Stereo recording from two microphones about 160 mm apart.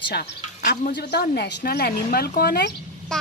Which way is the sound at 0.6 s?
55° left (ahead or behind).